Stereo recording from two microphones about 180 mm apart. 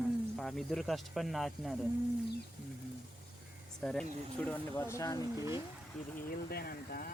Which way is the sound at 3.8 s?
5° left (ahead or behind).